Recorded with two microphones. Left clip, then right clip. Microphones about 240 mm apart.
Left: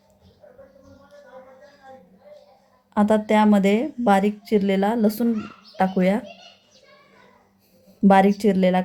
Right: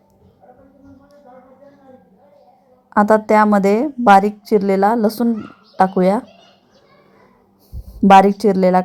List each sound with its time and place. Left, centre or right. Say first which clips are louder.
2.9 s a woman's voice: right 7 dB; centre
8.1 s a woman's voice: right 8 dB; centre